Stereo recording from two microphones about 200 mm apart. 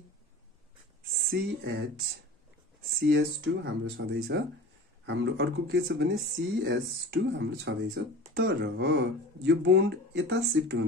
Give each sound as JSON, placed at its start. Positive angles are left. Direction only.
{"t": 1.1, "sound": "speech", "side_deg": -50}
{"t": 7.1, "sound": "speech", "side_deg": -60}